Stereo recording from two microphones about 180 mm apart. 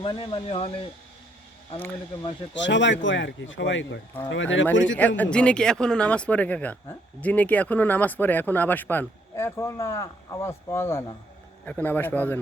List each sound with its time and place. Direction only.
0.0 s speech: 25° left (ahead or behind)
2.6 s speech: 90° left
4.9 s speech: 10° left (ahead or behind)